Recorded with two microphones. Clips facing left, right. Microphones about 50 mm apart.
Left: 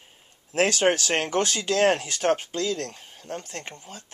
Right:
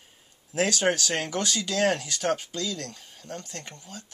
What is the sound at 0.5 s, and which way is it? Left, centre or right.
Speech, left.